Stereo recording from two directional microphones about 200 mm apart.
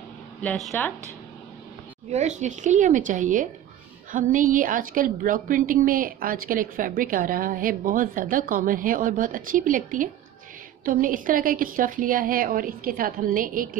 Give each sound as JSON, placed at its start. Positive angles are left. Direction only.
{"t": 0.4, "sound": "speech", "side_deg": 5}
{"t": 2.0, "sound": "a woman's voice", "side_deg": -35}